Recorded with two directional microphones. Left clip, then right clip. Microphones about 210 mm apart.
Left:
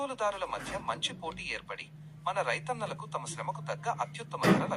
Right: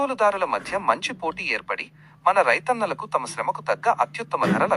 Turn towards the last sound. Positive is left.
turn(degrees=-40)  # may be behind; listen again after turning